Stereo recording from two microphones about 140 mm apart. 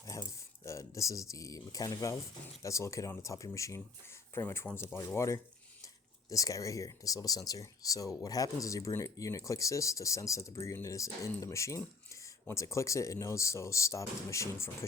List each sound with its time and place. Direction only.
0.0 s speech: 25° left (ahead or behind)